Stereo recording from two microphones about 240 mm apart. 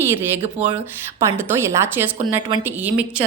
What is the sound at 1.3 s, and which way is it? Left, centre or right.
Speech, centre.